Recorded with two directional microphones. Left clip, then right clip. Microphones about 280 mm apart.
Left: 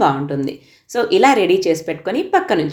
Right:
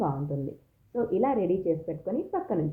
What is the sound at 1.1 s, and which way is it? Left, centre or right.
Speech, left.